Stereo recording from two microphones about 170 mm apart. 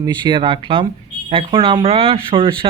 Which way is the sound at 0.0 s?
25° right (ahead or behind).